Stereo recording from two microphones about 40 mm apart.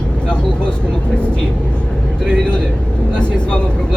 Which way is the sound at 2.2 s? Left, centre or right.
Left.